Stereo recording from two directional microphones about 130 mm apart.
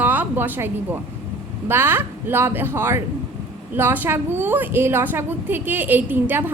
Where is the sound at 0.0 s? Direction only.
15° right (ahead or behind).